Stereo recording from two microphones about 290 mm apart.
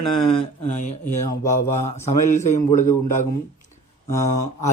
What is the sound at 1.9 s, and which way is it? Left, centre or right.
Speech, left.